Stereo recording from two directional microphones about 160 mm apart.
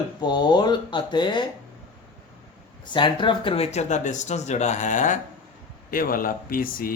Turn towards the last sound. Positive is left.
turn(degrees=60)  # may be behind; listen again after turning